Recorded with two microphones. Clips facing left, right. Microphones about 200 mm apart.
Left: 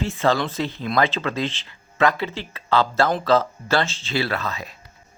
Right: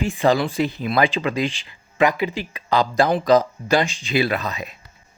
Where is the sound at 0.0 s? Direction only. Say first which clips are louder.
Right 3 dB; 15° right (ahead or behind).